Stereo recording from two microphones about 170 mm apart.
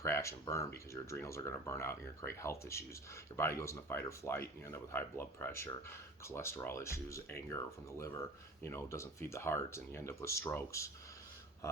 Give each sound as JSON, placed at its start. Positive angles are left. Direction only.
{"t": 0.0, "sound": "speech", "side_deg": 15}